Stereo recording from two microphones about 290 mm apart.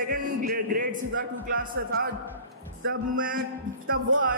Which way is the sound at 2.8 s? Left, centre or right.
Right.